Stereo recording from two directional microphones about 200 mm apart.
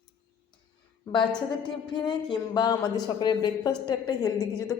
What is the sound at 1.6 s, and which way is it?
Speech, 20° left (ahead or behind).